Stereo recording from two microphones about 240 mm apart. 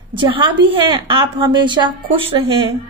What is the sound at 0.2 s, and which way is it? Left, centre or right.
Speech, right.